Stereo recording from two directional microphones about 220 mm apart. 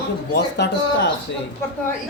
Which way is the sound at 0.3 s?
50° left (ahead or behind).